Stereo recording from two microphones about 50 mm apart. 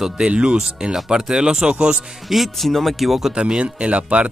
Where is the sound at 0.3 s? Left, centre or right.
Centre.